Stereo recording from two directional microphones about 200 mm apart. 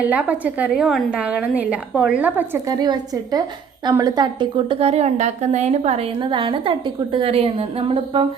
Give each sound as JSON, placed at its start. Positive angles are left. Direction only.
{"t": 0.0, "sound": "a woman's voice", "side_deg": -5}
{"t": 2.6, "sound": "a woman's voice", "side_deg": -20}